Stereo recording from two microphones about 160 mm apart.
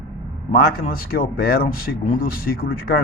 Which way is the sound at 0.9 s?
65° left (ahead or behind).